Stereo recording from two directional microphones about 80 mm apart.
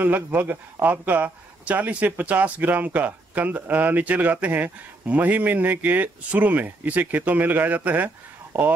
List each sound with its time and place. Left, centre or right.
0.0 s speech: right